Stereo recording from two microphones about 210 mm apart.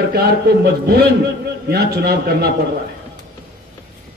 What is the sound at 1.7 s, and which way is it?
Speech, 50° right (ahead or behind).